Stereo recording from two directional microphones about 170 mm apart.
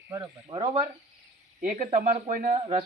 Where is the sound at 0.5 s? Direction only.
30° right (ahead or behind).